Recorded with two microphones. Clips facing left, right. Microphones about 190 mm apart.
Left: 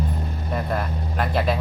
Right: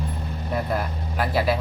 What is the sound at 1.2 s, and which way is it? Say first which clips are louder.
Speech: even; 5° right (ahead or behind).